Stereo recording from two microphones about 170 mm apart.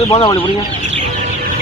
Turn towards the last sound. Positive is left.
turn(degrees=25)  # may be behind; listen again after turning